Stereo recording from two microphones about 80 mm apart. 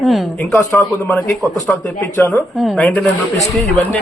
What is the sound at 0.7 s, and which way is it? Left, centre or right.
Speech, left.